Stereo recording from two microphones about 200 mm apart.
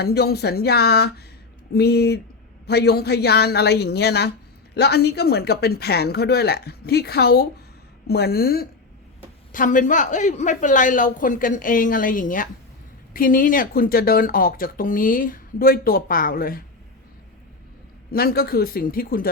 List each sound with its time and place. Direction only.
0.0 s a man's voice: 55° left (ahead or behind)
18.1 s speech: 50° left (ahead or behind)